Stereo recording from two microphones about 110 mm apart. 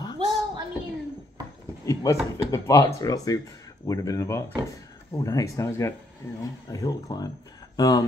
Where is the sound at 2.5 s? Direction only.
25° left (ahead or behind).